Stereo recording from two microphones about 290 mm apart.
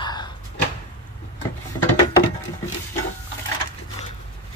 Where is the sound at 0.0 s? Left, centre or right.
Centre.